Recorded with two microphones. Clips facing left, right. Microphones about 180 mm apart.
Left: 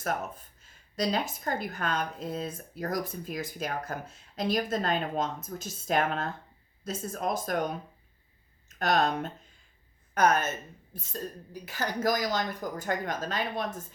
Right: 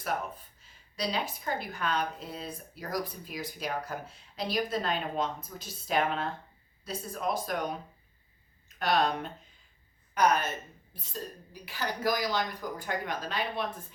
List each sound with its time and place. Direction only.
0.0 s speech: 45° left (ahead or behind)
8.7 s speech: 45° left (ahead or behind)
11.6 s speech: 45° left (ahead or behind)